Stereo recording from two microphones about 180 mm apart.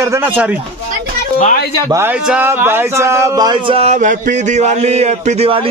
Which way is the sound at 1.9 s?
10° right (ahead or behind).